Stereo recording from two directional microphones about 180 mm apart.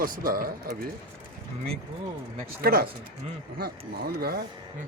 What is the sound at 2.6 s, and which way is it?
A man's voice, 60° right (ahead or behind).